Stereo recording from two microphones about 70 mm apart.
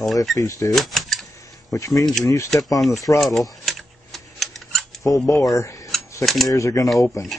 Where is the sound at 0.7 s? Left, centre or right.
Centre.